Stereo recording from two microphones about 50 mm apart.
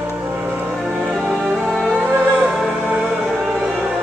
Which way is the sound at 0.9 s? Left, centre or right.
Centre.